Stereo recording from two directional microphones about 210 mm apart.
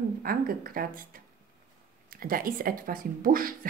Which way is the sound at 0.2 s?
45° right (ahead or behind).